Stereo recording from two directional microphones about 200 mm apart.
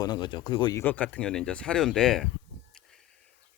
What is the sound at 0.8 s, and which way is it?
Speech, 10° left (ahead or behind).